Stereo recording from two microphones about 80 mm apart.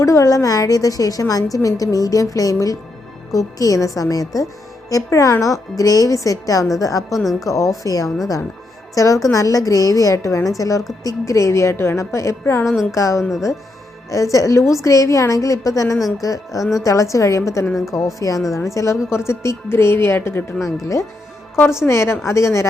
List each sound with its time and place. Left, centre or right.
0.0 s a woman's voice: left
7.2 s a woman's voice: centre
7.4 s a woman's voice: left
12.6 s a woman's voice: centre
12.9 s a woman's voice: left
16.0 s a woman's voice: centre
16.2 s a woman's voice: left